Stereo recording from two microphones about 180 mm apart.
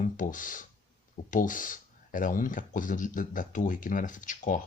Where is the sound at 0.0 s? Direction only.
45° left (ahead or behind).